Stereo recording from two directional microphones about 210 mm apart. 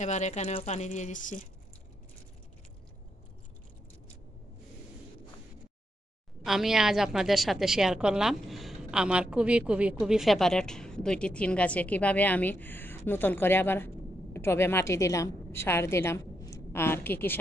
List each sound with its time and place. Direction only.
0.0 s speech: 35° left (ahead or behind)
6.4 s a woman's voice: centre (ahead or behind)